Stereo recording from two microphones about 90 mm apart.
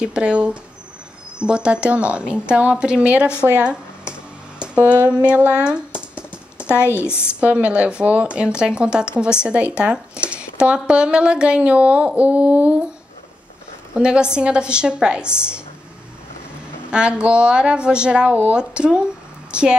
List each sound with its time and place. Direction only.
0.0 s speech: 10° right (ahead or behind)
4.7 s speech: 15° right (ahead or behind)
7.1 s a woman's voice: 25° left (ahead or behind)
7.3 s speech: 15° right (ahead or behind)
13.9 s speech: 10° right (ahead or behind)
16.9 s a woman's voice: 10° right (ahead or behind)